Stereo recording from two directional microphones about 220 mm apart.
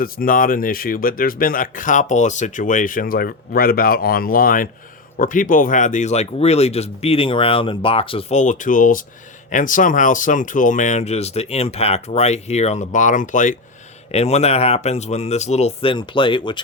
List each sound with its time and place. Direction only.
0.0 s speech: 40° left (ahead or behind); by 16.6 s 20° left (ahead or behind)